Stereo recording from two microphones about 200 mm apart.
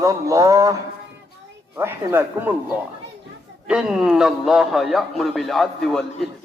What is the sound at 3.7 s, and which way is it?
A man's voice, 5° right (ahead or behind).